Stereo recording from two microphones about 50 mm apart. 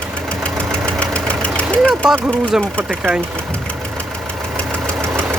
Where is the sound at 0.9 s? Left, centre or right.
Left.